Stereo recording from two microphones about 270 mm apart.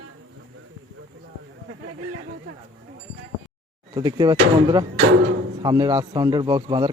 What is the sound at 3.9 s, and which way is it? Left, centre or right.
Speech, centre.